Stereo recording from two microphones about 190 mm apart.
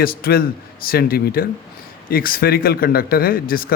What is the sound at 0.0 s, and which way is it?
Speech, 50° left (ahead or behind).